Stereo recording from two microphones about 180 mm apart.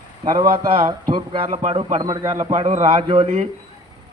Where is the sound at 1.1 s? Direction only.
30° right (ahead or behind).